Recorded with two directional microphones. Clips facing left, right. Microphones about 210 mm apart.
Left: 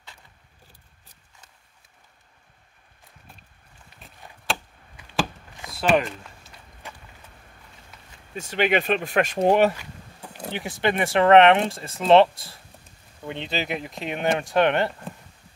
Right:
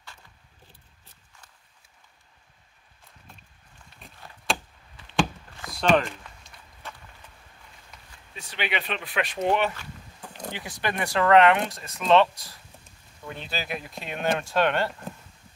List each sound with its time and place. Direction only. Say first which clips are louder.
5.7 s walk: left 1 dB; 5° left (ahead or behind)
8.4 s speech: left 9 dB; 45° left (ahead or behind)
10.5 s speech: left 7 dB; 25° left (ahead or behind)